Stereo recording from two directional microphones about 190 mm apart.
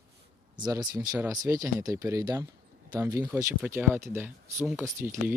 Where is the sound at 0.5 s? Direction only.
20° right (ahead or behind).